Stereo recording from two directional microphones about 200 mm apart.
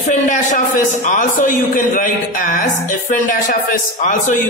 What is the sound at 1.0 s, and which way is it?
Mantra, 40° left (ahead or behind).